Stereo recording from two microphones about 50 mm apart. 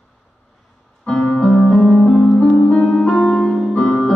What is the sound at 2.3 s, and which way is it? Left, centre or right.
Music, left.